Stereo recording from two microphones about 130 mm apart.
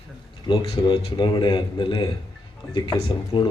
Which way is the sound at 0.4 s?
35° left (ahead or behind).